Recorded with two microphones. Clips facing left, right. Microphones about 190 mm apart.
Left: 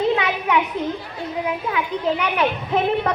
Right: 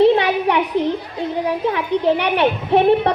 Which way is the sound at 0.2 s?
35° right (ahead or behind).